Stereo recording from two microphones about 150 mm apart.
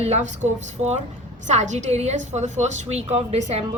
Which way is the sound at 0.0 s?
45° right (ahead or behind).